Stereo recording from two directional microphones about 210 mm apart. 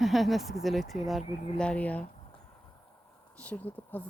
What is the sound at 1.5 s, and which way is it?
Speech, 5° left (ahead or behind).